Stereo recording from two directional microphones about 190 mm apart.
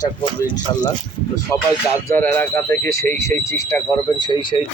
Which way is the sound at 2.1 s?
10° left (ahead or behind).